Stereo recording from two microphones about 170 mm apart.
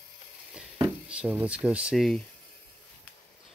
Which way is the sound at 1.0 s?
10° right (ahead or behind).